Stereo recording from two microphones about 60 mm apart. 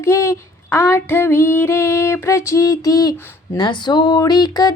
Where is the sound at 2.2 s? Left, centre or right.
Left.